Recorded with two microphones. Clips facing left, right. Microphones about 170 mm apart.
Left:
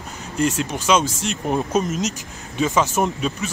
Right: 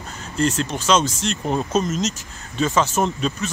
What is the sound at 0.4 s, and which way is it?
Speech, 10° left (ahead or behind).